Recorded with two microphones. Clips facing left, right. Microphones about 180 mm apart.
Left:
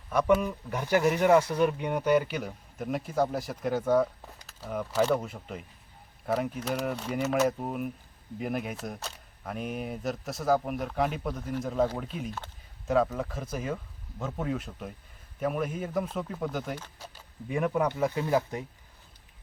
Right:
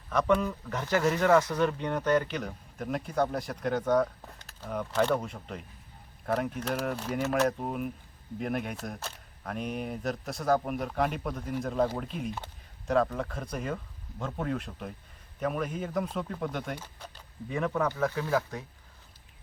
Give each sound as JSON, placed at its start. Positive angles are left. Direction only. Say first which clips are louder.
{"t": 0.1, "sound": "speech", "louder": "left 2 dB", "side_deg": 10}